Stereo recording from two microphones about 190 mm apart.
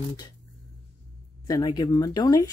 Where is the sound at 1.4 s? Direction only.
20° left (ahead or behind).